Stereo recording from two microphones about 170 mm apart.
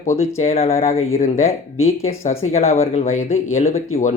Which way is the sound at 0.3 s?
40° left (ahead or behind).